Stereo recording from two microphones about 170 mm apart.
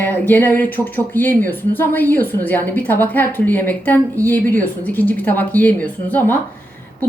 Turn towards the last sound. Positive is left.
turn(degrees=10)  # may be behind; listen again after turning